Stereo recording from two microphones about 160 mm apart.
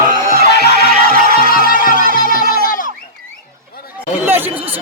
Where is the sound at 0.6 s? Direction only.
70° left (ahead or behind).